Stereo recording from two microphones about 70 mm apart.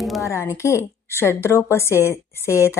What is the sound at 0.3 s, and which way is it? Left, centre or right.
A woman's voice, left.